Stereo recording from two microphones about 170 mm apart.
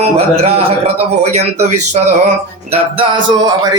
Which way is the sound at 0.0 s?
35° right (ahead or behind).